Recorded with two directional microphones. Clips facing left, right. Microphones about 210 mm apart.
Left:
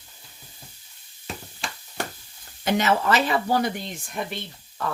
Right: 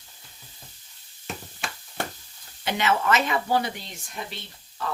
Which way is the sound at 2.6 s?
40° left (ahead or behind).